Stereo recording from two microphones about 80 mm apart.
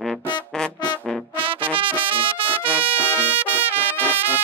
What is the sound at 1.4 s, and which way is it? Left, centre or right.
Music, right.